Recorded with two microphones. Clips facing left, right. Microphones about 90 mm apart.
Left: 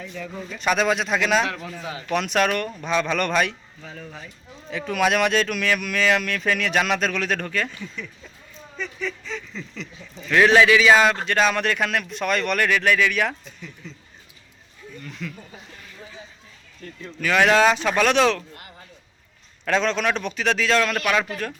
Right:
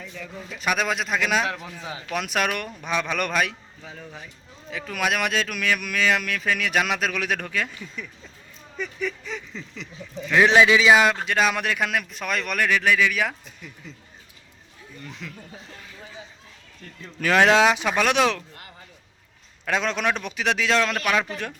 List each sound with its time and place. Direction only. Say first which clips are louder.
0.0 s a man's voice: left 4 dB; centre (ahead or behind); by 2.0 s 25° right (ahead or behind)
2.1 s speech: left 4 dB; 10° right (ahead or behind)
4.7 s speech: left 5 dB; centre (ahead or behind)
15.2 s speech: left 7 dB; 15° right (ahead or behind)
17.2 s speech: right 1 dB; 35° right (ahead or behind)
17.4 s speech: left 1 dB; 15° right (ahead or behind)
19.6 s speech: left 2 dB; 10° right (ahead or behind)